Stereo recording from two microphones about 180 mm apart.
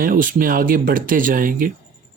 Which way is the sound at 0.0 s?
50° right (ahead or behind).